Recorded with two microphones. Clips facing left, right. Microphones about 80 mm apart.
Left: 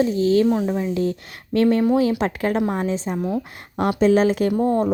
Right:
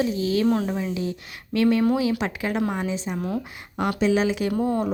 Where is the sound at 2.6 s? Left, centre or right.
Left.